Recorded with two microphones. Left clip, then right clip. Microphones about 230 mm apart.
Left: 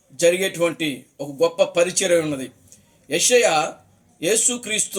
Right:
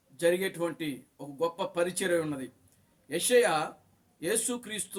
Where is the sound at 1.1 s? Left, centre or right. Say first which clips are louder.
Left 14 dB; centre.